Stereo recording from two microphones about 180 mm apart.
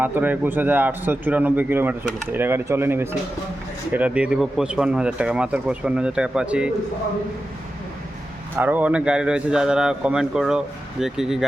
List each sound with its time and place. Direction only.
0.0 s a man's voice: 10° right (ahead or behind)
8.5 s speech: 10° right (ahead or behind)